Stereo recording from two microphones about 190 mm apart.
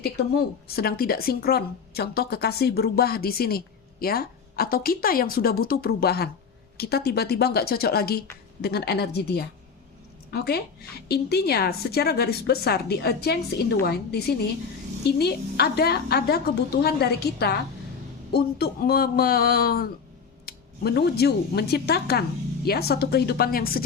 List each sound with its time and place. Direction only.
0.0 s a woman's voice: 55° left (ahead or behind)